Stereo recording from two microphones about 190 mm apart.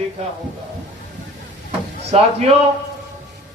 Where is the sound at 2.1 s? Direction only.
35° right (ahead or behind).